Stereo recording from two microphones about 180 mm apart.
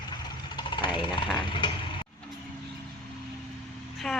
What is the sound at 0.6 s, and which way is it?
Jackhammer, 25° left (ahead or behind).